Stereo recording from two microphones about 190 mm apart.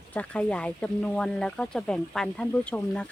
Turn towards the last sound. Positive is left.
turn(degrees=5)  # may be behind; listen again after turning